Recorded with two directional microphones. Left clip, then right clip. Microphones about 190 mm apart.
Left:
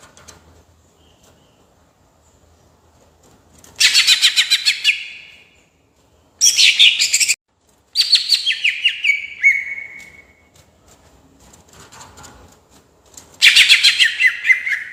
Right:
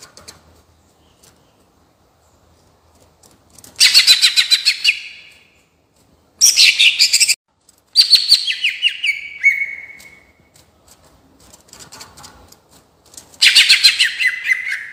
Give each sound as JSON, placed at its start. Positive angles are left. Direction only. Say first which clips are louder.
{"t": 3.8, "sound": "bird", "louder": "right 2 dB", "side_deg": 15}
{"t": 6.4, "sound": "bird", "louder": "even", "side_deg": 10}
{"t": 7.9, "sound": "chirp", "louder": "right 4 dB", "side_deg": 10}
{"t": 13.4, "sound": "bird", "louder": "even", "side_deg": 10}